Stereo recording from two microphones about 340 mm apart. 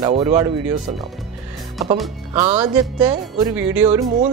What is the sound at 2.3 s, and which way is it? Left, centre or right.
Speech, centre.